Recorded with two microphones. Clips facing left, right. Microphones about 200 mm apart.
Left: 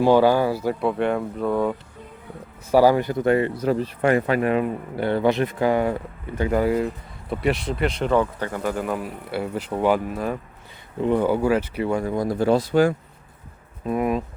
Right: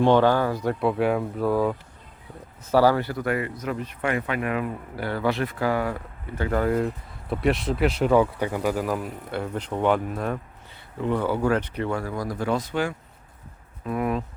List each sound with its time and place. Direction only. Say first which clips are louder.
0.0 s speech: left 2 dB; 10° left (ahead or behind)
2.6 s speech: left 3 dB; 15° left (ahead or behind)
11.0 s speech: left 4 dB; 15° left (ahead or behind); by 12.9 s 35° left (ahead or behind)
13.8 s speech: left 3 dB; 20° left (ahead or behind)